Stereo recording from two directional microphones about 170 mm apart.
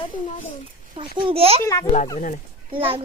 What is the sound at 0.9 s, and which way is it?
Speech, 30° right (ahead or behind).